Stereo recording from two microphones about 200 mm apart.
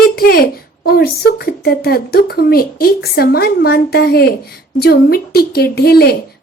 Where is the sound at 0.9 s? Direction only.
50° left (ahead or behind).